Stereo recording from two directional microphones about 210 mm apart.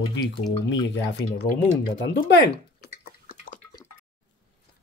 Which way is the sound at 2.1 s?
55° left (ahead or behind).